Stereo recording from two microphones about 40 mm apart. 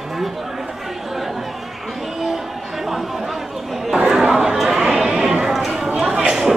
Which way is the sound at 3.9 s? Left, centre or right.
Centre.